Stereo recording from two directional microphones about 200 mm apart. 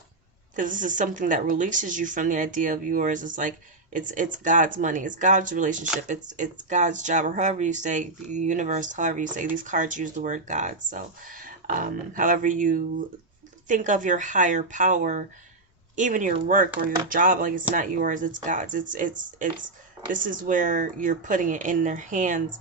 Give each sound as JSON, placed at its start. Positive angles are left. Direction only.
{"t": 0.5, "sound": "speech", "side_deg": -40}